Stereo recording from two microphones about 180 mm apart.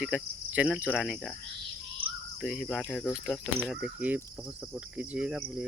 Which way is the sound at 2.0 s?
30° right (ahead or behind).